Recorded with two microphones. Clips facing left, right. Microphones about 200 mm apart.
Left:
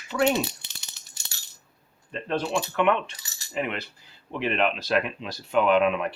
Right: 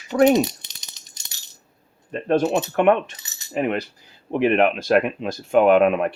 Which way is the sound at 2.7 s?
45° right (ahead or behind).